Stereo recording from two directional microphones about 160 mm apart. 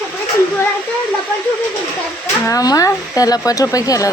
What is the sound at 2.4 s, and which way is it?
Speech, 20° left (ahead or behind).